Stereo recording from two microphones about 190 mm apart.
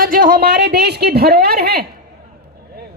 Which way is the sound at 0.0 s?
45° right (ahead or behind).